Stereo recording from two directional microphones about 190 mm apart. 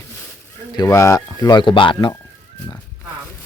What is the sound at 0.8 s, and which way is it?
Speech, 15° left (ahead or behind).